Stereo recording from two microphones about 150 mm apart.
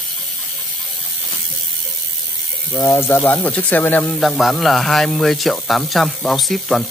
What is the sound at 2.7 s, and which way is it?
Speech, 20° left (ahead or behind).